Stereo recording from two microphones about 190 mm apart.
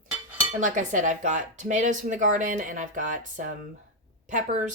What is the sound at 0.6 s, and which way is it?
Speech, 40° right (ahead or behind).